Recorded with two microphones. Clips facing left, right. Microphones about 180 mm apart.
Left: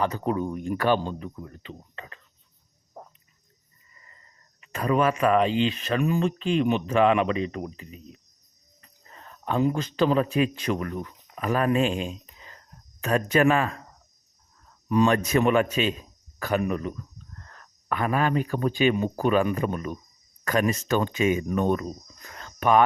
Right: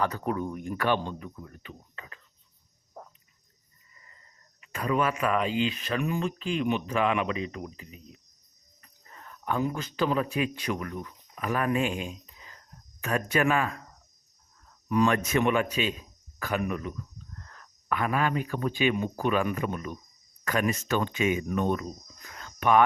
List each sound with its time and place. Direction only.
0.0 s speech: 25° left (ahead or behind)
0.8 s speech: 35° left (ahead or behind)
4.7 s speech: 40° left (ahead or behind)
9.1 s speech: 25° left (ahead or behind)
14.8 s speech: 25° left (ahead or behind); by 16.0 s 50° left (ahead or behind)
16.4 s speech: 35° left (ahead or behind)
22.4 s a sound: 40° left (ahead or behind)